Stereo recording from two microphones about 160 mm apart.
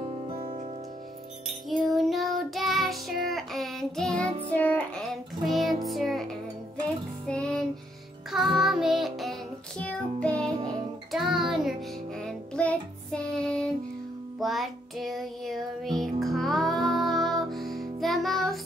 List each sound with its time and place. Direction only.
0.0 s music: 40° right (ahead or behind)
1.5 s music: centre (ahead or behind)
7.2 s music: 5° left (ahead or behind)